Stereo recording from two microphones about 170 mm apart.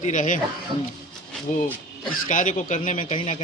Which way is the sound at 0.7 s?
30° right (ahead or behind).